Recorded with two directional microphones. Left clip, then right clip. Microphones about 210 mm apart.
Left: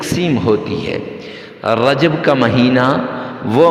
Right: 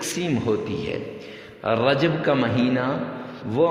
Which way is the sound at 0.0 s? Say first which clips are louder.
Left 9 dB; 30° left (ahead or behind).